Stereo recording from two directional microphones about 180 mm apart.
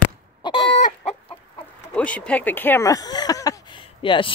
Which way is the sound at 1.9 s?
5° left (ahead or behind).